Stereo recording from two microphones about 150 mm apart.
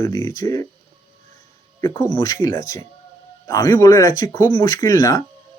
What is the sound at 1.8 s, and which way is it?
Speech, 30° left (ahead or behind).